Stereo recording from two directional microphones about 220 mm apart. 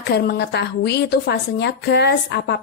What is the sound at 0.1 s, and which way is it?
A woman's voice, 50° left (ahead or behind).